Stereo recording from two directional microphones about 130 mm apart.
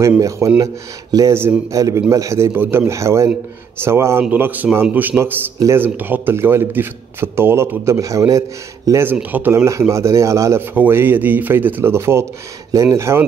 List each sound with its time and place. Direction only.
0.4 s a man's voice: 25° right (ahead or behind)